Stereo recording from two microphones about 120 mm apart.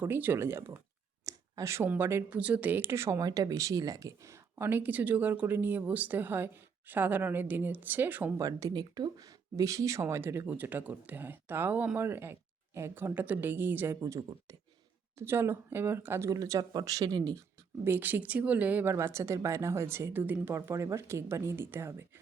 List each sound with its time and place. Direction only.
0.0 s speech: 15° right (ahead or behind)
8.4 s speech: 30° right (ahead or behind)
17.8 s speech: 15° right (ahead or behind)